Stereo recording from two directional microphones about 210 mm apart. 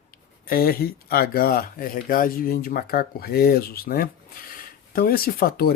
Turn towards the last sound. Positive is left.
turn(degrees=45)  # may be behind; listen again after turning